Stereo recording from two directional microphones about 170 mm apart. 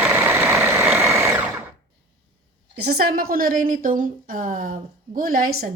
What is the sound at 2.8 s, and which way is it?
A woman's voice, 65° right (ahead or behind).